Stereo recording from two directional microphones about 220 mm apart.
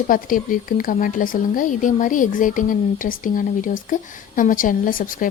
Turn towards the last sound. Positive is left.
turn(degrees=40)  # may be behind; listen again after turning